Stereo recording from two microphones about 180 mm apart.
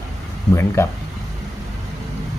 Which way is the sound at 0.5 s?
15° left (ahead or behind).